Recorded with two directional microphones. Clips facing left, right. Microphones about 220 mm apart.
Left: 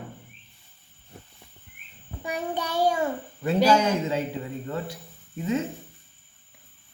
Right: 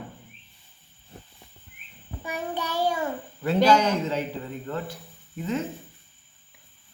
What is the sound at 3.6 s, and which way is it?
Speech, 10° left (ahead or behind).